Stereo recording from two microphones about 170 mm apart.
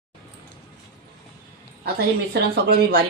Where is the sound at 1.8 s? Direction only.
70° right (ahead or behind).